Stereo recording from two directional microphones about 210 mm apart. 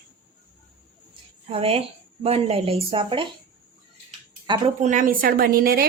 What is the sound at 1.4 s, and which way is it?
A woman's voice, 25° right (ahead or behind).